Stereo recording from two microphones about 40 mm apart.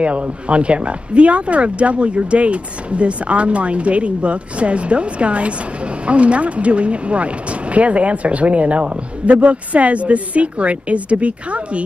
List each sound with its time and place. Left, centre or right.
0.0 s speech: right